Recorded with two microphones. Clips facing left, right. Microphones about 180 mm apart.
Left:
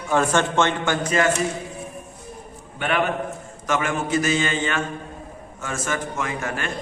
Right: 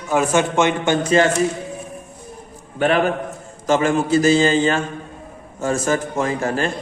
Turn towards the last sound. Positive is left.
turn(degrees=-35)  # may be behind; listen again after turning